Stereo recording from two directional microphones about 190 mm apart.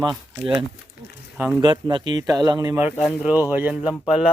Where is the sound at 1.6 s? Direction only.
25° right (ahead or behind); by 4.3 s 5° right (ahead or behind).